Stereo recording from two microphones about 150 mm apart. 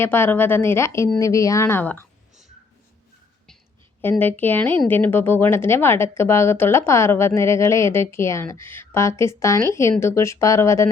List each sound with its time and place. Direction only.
0.0 s speech: 15° left (ahead or behind)
4.2 s speech: 10° left (ahead or behind)